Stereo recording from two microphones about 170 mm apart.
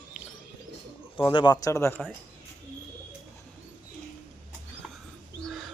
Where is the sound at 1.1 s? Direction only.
30° left (ahead or behind).